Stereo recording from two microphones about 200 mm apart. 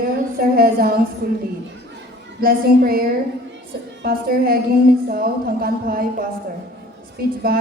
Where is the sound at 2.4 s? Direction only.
45° right (ahead or behind).